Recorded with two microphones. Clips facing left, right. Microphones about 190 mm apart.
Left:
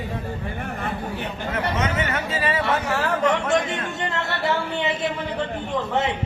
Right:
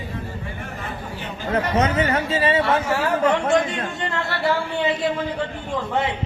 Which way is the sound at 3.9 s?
20° left (ahead or behind).